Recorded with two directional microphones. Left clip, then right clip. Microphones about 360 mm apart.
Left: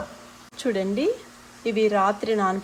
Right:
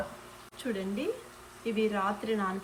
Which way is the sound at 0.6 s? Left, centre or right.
Centre.